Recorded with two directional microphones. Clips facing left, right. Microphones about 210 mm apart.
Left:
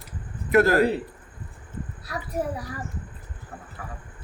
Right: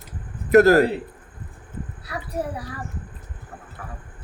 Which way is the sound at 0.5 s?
40° right (ahead or behind).